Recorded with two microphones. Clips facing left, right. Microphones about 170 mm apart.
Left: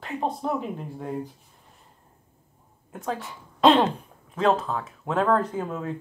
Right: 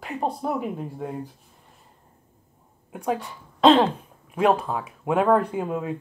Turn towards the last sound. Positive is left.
turn(degrees=-10)  # may be behind; listen again after turning